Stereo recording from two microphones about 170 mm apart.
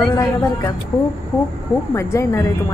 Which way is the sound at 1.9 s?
15° left (ahead or behind).